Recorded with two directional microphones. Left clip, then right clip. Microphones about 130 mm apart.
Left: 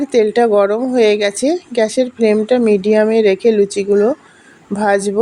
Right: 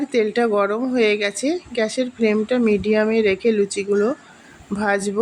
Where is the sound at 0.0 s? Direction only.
40° left (ahead or behind).